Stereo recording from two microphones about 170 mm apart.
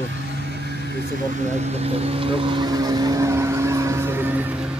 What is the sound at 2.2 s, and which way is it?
Speech, 30° right (ahead or behind).